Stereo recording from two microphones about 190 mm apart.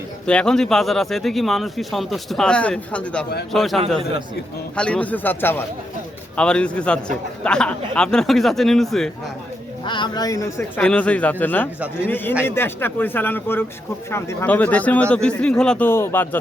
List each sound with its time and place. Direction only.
0.3 s speech: 5° left (ahead or behind)
9.8 s speech: 25° left (ahead or behind)
10.8 s speech: 5° left (ahead or behind)